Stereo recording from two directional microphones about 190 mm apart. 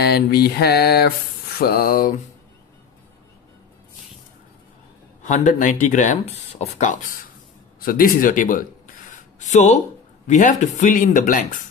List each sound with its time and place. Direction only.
0.0 s mantra: 55° left (ahead or behind)
1.6 s speech: 55° left (ahead or behind)
5.2 s speech: 40° left (ahead or behind)